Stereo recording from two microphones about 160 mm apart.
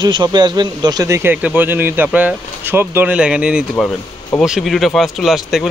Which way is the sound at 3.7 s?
10° left (ahead or behind).